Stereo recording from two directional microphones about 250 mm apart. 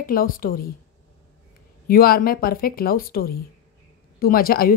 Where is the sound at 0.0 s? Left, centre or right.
Left.